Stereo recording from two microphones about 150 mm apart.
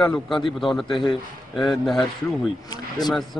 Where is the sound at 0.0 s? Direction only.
5° left (ahead or behind).